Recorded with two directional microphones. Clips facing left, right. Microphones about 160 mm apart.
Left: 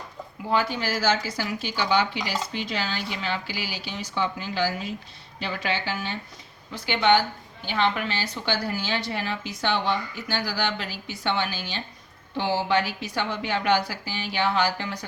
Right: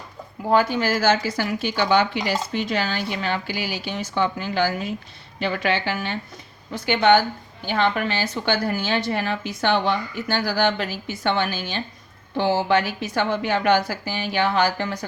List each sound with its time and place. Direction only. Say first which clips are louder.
0.5 s a woman's voice: right 6 dB; 50° right (ahead or behind)
6.7 s speech: right 4 dB; 50° right (ahead or behind)